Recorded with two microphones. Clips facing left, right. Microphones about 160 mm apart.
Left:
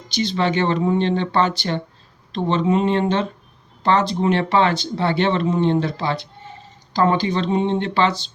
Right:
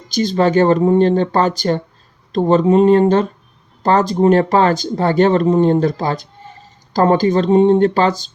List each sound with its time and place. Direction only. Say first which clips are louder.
0.1 s speech: right 6 dB; 45° right (ahead or behind)